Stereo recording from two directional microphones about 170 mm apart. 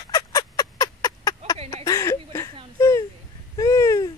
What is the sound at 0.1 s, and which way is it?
Fowl, 20° left (ahead or behind).